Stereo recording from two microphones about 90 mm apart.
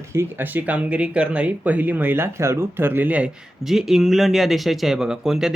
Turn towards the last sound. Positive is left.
turn(degrees=-5)  # may be behind; listen again after turning